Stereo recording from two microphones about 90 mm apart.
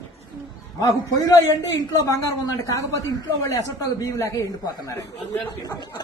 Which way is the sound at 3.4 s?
40° left (ahead or behind).